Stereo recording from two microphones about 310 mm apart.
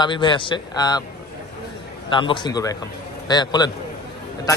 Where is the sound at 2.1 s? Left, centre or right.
Centre.